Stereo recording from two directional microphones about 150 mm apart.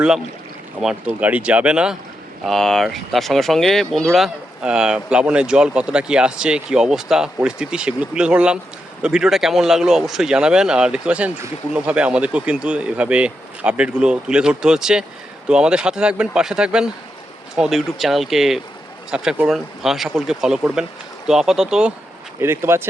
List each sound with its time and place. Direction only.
0.8 s speech: 5° right (ahead or behind)
22.4 s speech: 15° right (ahead or behind)